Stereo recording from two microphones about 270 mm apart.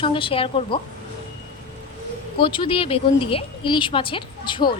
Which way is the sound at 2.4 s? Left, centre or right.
Centre.